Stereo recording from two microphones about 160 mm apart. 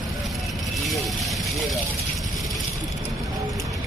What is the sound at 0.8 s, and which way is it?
Vehicle, centre (ahead or behind).